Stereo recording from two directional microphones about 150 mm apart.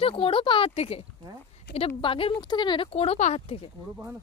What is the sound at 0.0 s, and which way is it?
Speech, 40° left (ahead or behind).